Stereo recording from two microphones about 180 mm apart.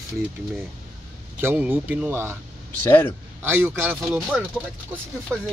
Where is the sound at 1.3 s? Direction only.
10° right (ahead or behind).